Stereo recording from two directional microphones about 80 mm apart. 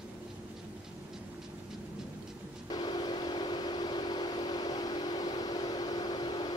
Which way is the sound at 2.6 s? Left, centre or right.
Left.